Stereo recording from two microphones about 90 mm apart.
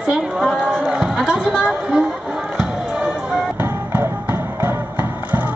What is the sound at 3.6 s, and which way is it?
Music, 30° right (ahead or behind).